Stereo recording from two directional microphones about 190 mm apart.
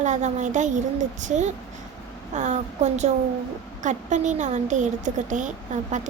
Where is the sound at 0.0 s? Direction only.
40° right (ahead or behind).